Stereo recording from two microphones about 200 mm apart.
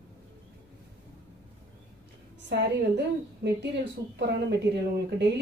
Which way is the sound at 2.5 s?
60° right (ahead or behind).